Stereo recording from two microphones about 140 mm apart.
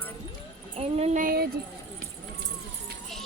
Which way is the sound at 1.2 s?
90° right.